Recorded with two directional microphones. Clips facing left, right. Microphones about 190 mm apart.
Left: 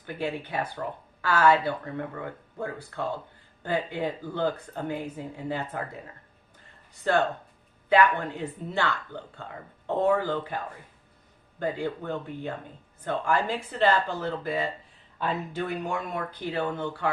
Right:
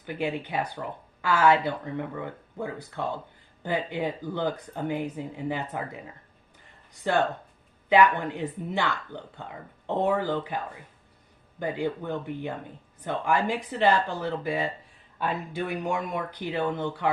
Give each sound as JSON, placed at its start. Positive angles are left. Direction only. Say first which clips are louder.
{"t": 0.0, "sound": "speech", "louder": "right 2 dB", "side_deg": -15}
{"t": 11.6, "sound": "speech", "louder": "right 1 dB", "side_deg": -15}